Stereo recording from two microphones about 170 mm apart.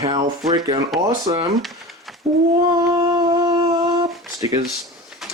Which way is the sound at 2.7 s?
25° right (ahead or behind).